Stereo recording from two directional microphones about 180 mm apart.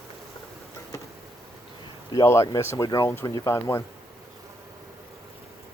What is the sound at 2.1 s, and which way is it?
Speech, 15° left (ahead or behind).